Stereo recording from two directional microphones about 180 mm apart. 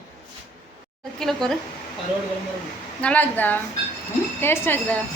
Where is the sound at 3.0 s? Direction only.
10° left (ahead or behind).